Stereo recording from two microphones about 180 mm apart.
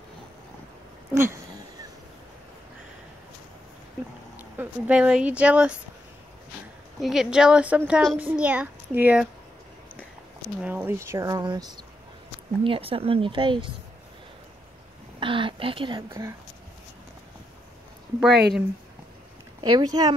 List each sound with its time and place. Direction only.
1.1 s a sound: 15° right (ahead or behind)
4.4 s speech: 10° right (ahead or behind)
7.0 s a woman's voice: centre (ahead or behind)
10.6 s speech: 10° right (ahead or behind); by 13.7 s 30° right (ahead or behind)
15.1 s a woman's voice: 30° right (ahead or behind)
16.1 s a child's voice: 15° right (ahead or behind)
18.2 s a woman's voice: 5° right (ahead or behind)
19.6 s speech: 20° right (ahead or behind)